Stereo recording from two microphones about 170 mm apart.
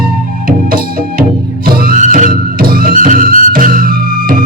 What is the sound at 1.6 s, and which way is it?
Music, 60° right (ahead or behind).